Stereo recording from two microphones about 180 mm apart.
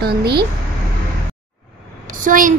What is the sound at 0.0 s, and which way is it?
Speech, 60° right (ahead or behind).